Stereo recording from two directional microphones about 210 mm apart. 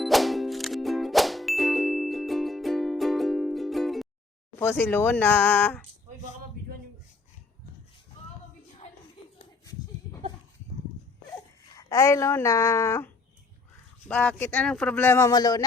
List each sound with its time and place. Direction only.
0.0 s ding: centre (ahead or behind)
4.6 s speech: 10° left (ahead or behind)
9.4 s a sound: 15° left (ahead or behind)
11.8 s speech: 15° left (ahead or behind)
14.1 s speech: 5° left (ahead or behind)